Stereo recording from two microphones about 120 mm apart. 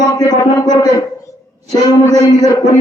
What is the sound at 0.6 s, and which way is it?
Speech, 35° left (ahead or behind).